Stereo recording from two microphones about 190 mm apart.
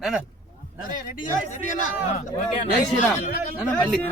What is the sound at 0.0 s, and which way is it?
Speech, 5° right (ahead or behind).